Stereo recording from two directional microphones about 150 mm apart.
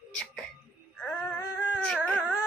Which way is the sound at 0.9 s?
10° left (ahead or behind).